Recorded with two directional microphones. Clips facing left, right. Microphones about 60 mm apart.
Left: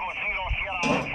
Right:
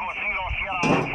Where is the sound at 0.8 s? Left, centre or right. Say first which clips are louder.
Right 4 dB; right.